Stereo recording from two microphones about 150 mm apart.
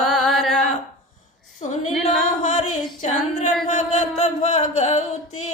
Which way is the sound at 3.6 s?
55° left (ahead or behind).